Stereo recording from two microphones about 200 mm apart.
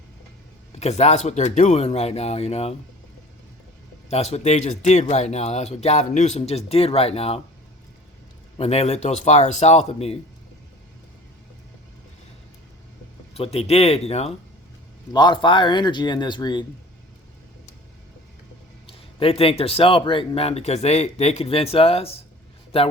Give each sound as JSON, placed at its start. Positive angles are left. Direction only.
{"t": 0.7, "sound": "speech", "side_deg": 35}
{"t": 4.1, "sound": "speech", "side_deg": 30}
{"t": 8.5, "sound": "speech", "side_deg": 30}
{"t": 13.3, "sound": "speech", "side_deg": 30}
{"t": 18.9, "sound": "speech", "side_deg": 30}